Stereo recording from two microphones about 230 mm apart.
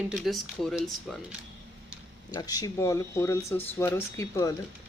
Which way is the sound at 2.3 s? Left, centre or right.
Centre.